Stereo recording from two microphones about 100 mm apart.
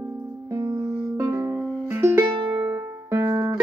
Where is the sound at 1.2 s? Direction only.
25° right (ahead or behind).